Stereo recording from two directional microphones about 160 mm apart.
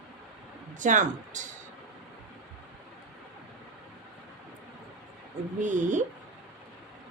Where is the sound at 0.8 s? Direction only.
50° right (ahead or behind).